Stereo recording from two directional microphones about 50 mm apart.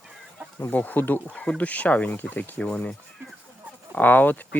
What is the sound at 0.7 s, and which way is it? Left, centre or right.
Speech, left.